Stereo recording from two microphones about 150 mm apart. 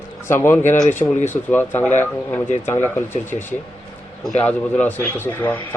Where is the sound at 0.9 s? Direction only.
55° left (ahead or behind).